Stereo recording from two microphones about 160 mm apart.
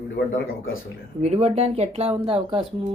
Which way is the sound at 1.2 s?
40° right (ahead or behind).